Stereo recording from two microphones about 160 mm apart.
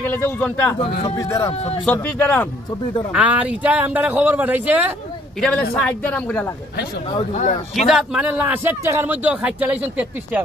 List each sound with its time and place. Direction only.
0.0 s speech: 10° left (ahead or behind)
1.5 s speech: 40° left (ahead or behind)
1.9 s speech: 10° left (ahead or behind)
3.1 s a man's voice: 10° right (ahead or behind)
5.4 s speech: 5° left (ahead or behind)
7.7 s a man's voice: centre (ahead or behind)